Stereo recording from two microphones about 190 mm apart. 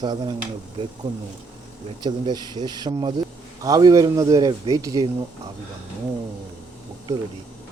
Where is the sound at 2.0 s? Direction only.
20° right (ahead or behind).